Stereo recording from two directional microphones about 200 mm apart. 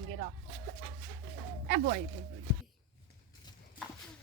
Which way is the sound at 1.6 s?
55° right (ahead or behind).